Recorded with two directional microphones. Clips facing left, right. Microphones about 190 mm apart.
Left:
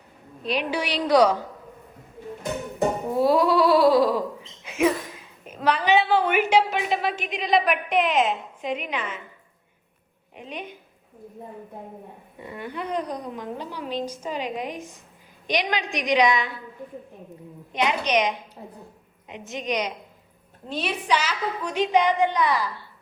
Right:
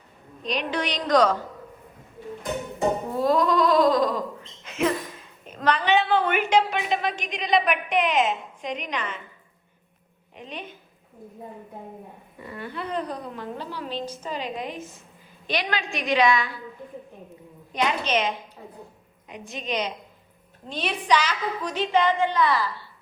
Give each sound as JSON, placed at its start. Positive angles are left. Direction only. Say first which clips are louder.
{"t": 0.4, "sound": "a woman's voice", "louder": "left 1 dB", "side_deg": 10}
{"t": 3.1, "sound": "bleat", "louder": "left 4 dB", "side_deg": 10}
{"t": 5.5, "sound": "a woman's voice", "louder": "left 1 dB", "side_deg": 10}
{"t": 10.3, "sound": "a woman's voice", "louder": "left 2 dB", "side_deg": 10}
{"t": 12.4, "sound": "a woman's voice", "louder": "left 1 dB", "side_deg": 15}
{"t": 17.7, "sound": "a woman's voice", "louder": "left 1 dB", "side_deg": 20}